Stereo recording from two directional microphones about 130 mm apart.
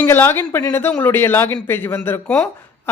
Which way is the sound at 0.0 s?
15° left (ahead or behind).